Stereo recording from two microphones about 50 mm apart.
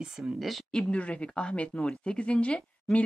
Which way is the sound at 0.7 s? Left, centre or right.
Left.